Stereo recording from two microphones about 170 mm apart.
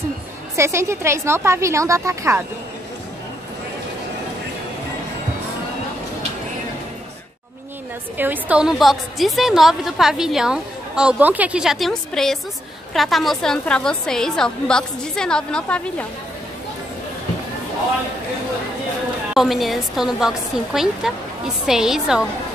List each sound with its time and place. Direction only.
0.6 s a woman's voice: 15° right (ahead or behind)
8.2 s a woman's voice: 10° right (ahead or behind); by 16.1 s 5° left (ahead or behind)
19.3 s a woman's voice: centre (ahead or behind)